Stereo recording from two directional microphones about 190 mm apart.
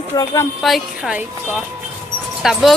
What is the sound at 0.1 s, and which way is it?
Speech, 20° left (ahead or behind).